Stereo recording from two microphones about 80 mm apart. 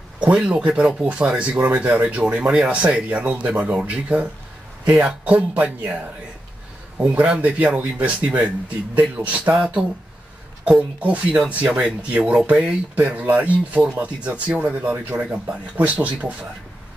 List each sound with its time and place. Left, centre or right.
0.2 s speech: centre
1.3 s speech: centre
7.0 s speech: centre
11.0 s speech: centre